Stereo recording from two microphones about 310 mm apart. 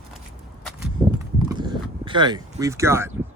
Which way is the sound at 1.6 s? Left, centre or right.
Centre.